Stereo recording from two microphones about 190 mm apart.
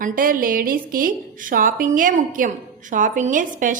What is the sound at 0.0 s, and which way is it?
A woman's voice, 45° right (ahead or behind).